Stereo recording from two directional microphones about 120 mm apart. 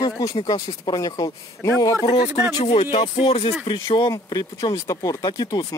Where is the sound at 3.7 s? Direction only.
40° left (ahead or behind).